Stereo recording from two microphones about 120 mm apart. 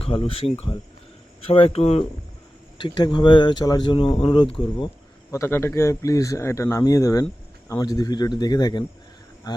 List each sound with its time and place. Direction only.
0.0 s speech: 50° left (ahead or behind)
2.7 s speech: 40° left (ahead or behind)
5.3 s speech: 20° left (ahead or behind)